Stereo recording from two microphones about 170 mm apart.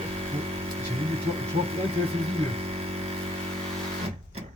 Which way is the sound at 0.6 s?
35° right (ahead or behind).